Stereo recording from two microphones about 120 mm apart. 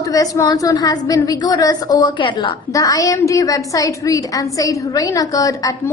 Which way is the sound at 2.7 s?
30° left (ahead or behind).